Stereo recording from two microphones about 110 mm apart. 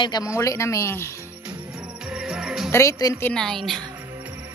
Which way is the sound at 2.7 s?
25° left (ahead or behind).